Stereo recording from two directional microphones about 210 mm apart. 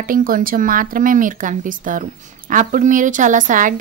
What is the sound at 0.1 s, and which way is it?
A woman's voice, 40° right (ahead or behind).